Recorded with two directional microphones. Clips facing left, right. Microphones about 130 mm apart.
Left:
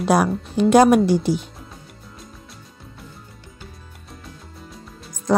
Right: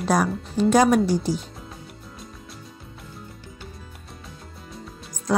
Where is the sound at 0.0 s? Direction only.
65° left (ahead or behind).